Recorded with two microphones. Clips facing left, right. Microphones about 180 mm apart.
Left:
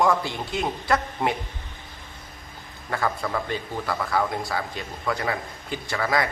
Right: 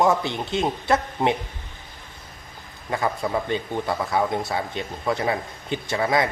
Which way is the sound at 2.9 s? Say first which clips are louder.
Right 2 dB; 20° right (ahead or behind).